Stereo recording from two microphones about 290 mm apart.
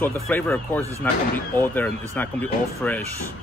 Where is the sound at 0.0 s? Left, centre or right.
Centre.